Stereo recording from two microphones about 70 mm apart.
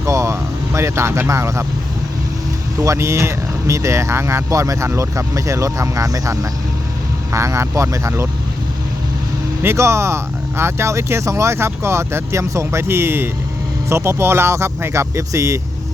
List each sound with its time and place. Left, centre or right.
0.0 s vehicle: right
2.7 s speech: right
7.3 s speech: right
9.6 s speech: right